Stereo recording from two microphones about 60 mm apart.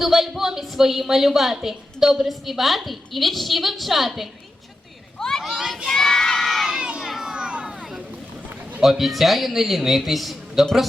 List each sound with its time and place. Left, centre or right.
0.0 s a woman's voice: centre
5.2 s children playing: centre
5.5 s crowd: centre
6.7 s children playing: centre
7.3 s a sound: centre
8.8 s a woman's voice: centre